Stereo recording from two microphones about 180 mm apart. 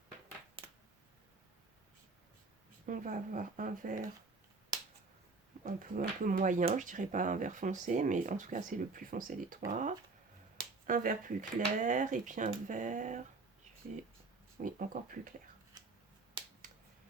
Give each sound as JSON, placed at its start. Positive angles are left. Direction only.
{"t": 2.8, "sound": "speech", "side_deg": -45}
{"t": 5.6, "sound": "speech", "side_deg": -50}
{"t": 14.6, "sound": "speech", "side_deg": -50}